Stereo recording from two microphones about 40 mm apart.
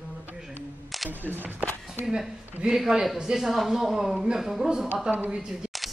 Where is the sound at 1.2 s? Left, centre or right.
Right.